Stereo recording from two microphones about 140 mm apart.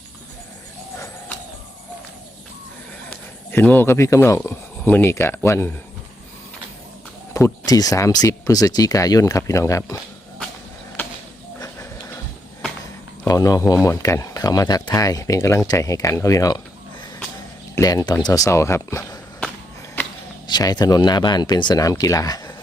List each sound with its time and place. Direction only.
3.1 s speech: 10° left (ahead or behind)
7.3 s speech: 25° left (ahead or behind)
13.2 s speech: 25° left (ahead or behind)
17.7 s speech: 25° left (ahead or behind)
20.0 s a sound: 10° left (ahead or behind)
20.5 s speech: 30° left (ahead or behind)